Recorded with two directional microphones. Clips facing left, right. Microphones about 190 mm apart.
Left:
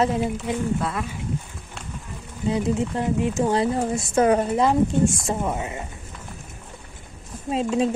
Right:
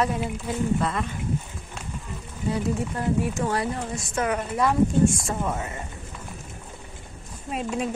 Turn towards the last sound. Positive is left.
turn(degrees=25)  # may be behind; listen again after turning